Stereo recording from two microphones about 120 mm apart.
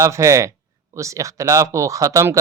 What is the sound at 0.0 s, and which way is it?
Speech, 25° right (ahead or behind).